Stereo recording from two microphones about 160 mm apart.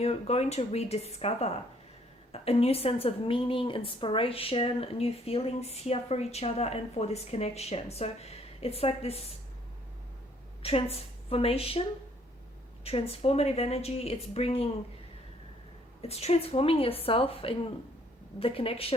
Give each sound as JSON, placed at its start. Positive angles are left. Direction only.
{"t": 0.0, "sound": "a woman's voice", "side_deg": 40}
{"t": 10.6, "sound": "a woman's voice", "side_deg": 35}
{"t": 12.8, "sound": "a woman's voice", "side_deg": 40}
{"t": 16.0, "sound": "a woman's voice", "side_deg": 40}